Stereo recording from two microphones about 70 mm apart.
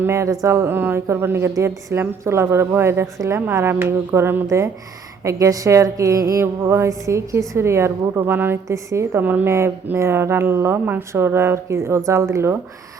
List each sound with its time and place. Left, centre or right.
0.0 s a woman's voice: right
0.7 s a woman's voice: right
4.4 s a woman's voice: right
8.2 s speech: right
8.6 s a woman's voice: right
9.1 s a woman's voice: right